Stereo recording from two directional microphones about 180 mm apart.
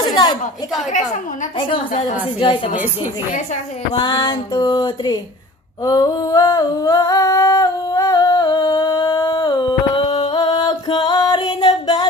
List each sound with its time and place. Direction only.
0.0 s a sound: 20° left (ahead or behind)
3.9 s music: 25° left (ahead or behind)
5.9 s humming: 20° left (ahead or behind)